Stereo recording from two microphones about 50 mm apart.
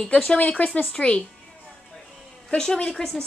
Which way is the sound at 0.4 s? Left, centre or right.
Left.